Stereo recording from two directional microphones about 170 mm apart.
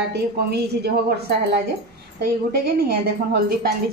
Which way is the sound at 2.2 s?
65° right (ahead or behind).